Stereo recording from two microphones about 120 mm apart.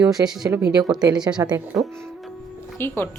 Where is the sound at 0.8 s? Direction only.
35° right (ahead or behind).